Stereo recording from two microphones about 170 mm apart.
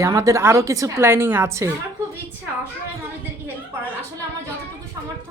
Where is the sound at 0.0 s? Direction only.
20° right (ahead or behind).